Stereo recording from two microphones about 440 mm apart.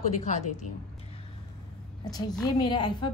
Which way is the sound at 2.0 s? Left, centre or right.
Centre.